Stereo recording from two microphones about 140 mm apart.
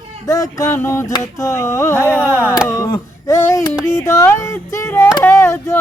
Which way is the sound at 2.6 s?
25° left (ahead or behind).